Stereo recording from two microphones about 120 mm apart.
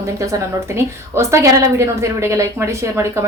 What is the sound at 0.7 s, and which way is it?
Speech, 25° right (ahead or behind).